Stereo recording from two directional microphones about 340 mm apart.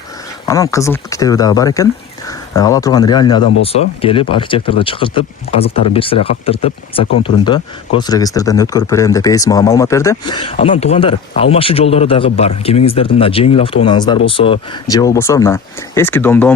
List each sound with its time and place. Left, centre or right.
0.4 s speech: centre